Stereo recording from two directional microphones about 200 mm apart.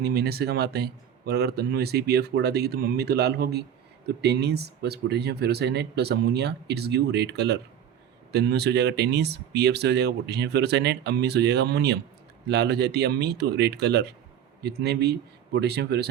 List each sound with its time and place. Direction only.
0.0 s speech: 50° right (ahead or behind)